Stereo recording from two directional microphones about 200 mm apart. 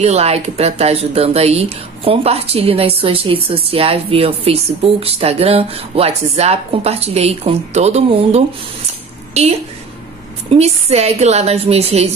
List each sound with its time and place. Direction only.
0.0 s a woman's voice: 30° right (ahead or behind)